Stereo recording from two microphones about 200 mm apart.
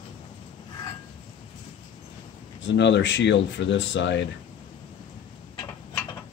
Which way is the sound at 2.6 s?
65° left (ahead or behind).